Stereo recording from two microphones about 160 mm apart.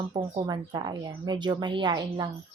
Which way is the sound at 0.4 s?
25° right (ahead or behind).